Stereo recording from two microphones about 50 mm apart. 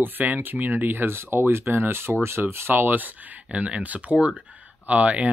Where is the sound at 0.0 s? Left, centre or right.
Right.